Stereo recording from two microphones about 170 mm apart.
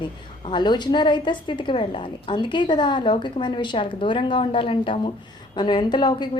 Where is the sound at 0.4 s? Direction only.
25° left (ahead or behind).